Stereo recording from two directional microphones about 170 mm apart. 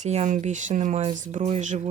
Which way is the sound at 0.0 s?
45° right (ahead or behind).